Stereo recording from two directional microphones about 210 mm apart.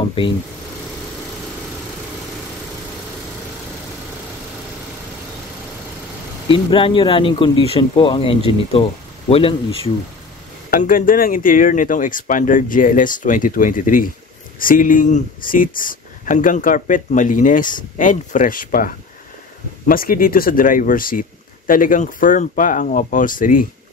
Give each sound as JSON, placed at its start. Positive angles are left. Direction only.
{"t": 6.5, "sound": "speech", "side_deg": 25}
{"t": 10.7, "sound": "speech", "side_deg": 40}